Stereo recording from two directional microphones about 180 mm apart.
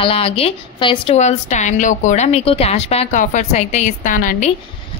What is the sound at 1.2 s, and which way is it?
A woman's voice, 40° left (ahead or behind).